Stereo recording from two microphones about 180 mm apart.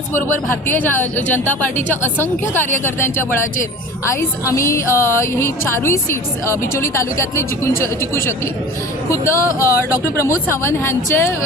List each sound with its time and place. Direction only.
0.7 s speech: 10° left (ahead or behind)
4.2 s speech: 15° left (ahead or behind)